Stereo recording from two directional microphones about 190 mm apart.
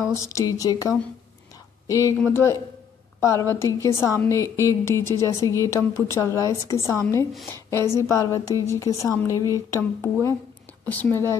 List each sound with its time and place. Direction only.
0.0 s a woman's voice: 15° left (ahead or behind)